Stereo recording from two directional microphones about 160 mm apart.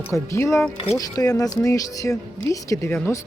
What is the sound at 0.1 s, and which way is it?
Speech, 15° left (ahead or behind).